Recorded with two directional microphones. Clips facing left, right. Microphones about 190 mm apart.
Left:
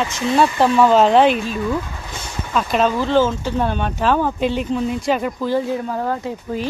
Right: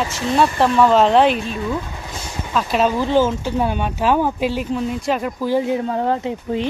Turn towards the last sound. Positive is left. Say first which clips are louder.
# right 2 dB
turn(degrees=-25)  # may be behind; listen again after turning